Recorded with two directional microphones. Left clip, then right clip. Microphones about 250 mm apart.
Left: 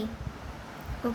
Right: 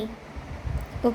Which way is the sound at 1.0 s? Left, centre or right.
Right.